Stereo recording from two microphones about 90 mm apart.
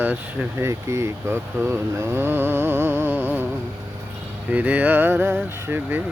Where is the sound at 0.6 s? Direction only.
35° right (ahead or behind).